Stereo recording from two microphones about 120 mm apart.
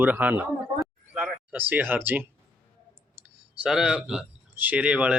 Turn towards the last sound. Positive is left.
turn(degrees=-10)  # may be behind; listen again after turning